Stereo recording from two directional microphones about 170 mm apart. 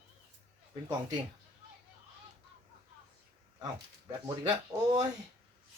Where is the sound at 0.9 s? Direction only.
25° right (ahead or behind).